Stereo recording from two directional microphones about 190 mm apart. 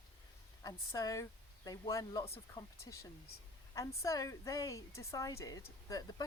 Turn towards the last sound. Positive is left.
turn(degrees=20)  # may be behind; listen again after turning